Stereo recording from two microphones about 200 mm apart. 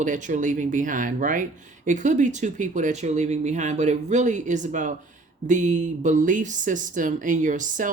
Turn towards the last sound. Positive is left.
turn(degrees=-40)  # may be behind; listen again after turning